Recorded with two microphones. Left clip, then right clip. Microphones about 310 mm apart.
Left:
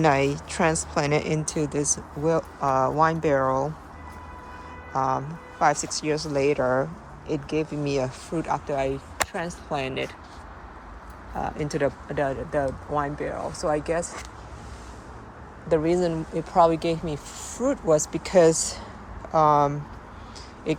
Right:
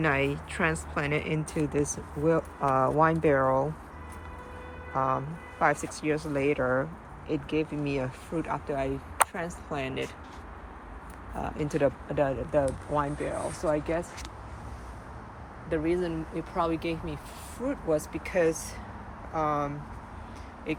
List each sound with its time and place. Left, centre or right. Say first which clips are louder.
0.0 s a woman's voice: left 6 dB; centre
4.9 s a woman's voice: left 3 dB; centre
11.6 s a woman's voice: right 1 dB; centre
15.7 s speech: left 7 dB; centre